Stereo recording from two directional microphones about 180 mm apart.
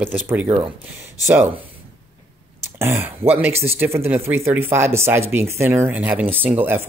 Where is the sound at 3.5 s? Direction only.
35° right (ahead or behind).